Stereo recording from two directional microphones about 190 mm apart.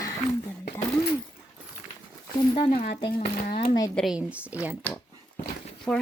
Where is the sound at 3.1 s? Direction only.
55° left (ahead or behind).